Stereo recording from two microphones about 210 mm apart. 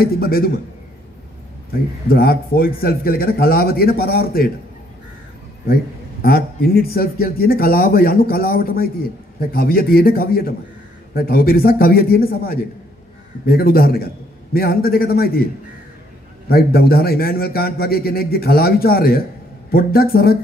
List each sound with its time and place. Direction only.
0.0 s a man's voice: 45° left (ahead or behind)
2.0 s a man's voice: 45° left (ahead or behind)
6.2 s a man's voice: 45° left (ahead or behind)
16.4 s a man's voice: 45° left (ahead or behind)